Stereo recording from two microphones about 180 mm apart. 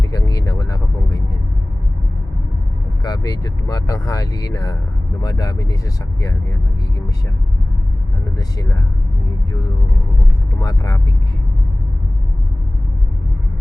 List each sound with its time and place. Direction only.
0.1 s a sound: 20° left (ahead or behind)
3.0 s speech: 20° left (ahead or behind)
8.4 s speech: 20° left (ahead or behind)
10.6 s speech: 20° left (ahead or behind)